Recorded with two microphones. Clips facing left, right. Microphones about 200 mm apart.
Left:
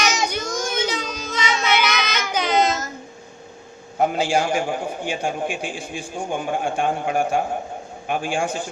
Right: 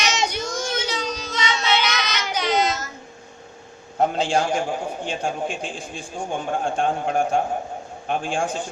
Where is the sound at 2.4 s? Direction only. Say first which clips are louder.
Left 2 dB; 50° left (ahead or behind).